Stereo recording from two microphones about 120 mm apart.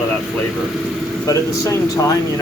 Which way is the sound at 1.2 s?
25° left (ahead or behind).